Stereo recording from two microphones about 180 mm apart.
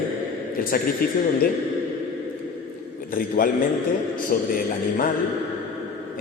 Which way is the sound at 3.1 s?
50° left (ahead or behind).